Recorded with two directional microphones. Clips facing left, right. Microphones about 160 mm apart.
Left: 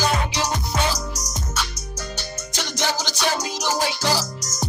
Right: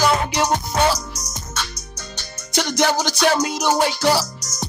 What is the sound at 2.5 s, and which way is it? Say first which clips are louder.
Music: right 8 dB; 60° right (ahead or behind).